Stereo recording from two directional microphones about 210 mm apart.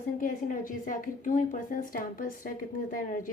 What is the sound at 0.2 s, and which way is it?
A woman's voice, 40° left (ahead or behind).